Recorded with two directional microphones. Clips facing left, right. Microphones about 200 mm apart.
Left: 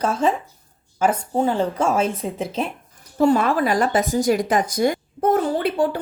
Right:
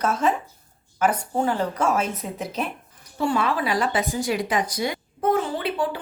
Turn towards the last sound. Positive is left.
turn(degrees=45)  # may be behind; listen again after turning